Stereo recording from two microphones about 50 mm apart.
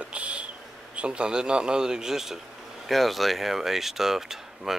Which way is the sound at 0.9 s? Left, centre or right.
Right.